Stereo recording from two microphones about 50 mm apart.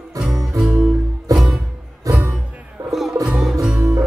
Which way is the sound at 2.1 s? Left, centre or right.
Right.